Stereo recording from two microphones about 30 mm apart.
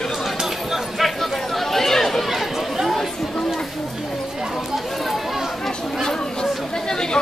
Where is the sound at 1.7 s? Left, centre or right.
Centre.